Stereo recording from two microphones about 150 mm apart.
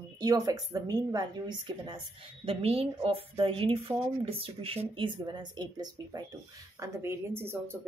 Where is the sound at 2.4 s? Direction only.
40° right (ahead or behind).